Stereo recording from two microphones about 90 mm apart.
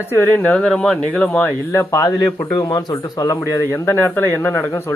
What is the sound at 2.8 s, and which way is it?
Speech, 50° left (ahead or behind).